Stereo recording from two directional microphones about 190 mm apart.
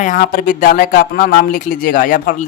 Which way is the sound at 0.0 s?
45° left (ahead or behind).